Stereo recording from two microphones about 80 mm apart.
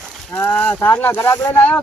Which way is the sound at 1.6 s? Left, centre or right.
Centre.